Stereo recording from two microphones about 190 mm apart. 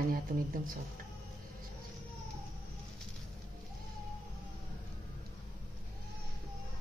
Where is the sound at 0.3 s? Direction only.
50° right (ahead or behind).